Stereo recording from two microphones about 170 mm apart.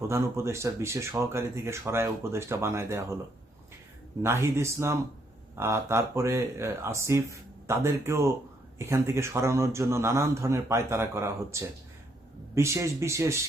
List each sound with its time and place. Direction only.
0.1 s speech: 15° right (ahead or behind)
4.2 s speech: 15° right (ahead or behind)